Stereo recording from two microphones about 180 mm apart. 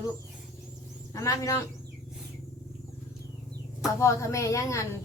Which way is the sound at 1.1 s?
15° left (ahead or behind).